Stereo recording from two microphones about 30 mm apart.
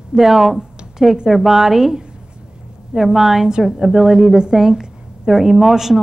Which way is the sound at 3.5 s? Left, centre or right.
Right.